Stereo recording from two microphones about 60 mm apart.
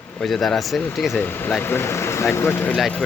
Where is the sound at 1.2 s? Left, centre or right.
Left.